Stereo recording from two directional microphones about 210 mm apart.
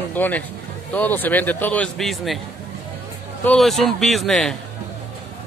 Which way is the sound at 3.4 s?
Centre (ahead or behind).